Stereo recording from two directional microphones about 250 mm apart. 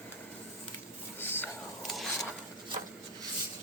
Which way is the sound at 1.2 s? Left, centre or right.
Centre.